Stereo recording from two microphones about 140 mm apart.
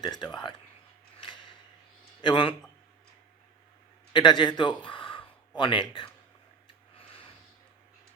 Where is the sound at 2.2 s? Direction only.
35° left (ahead or behind).